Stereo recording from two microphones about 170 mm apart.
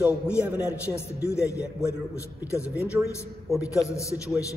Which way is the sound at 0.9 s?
15° left (ahead or behind).